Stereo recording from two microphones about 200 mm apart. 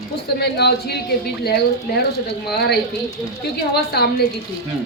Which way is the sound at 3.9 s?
50° left (ahead or behind).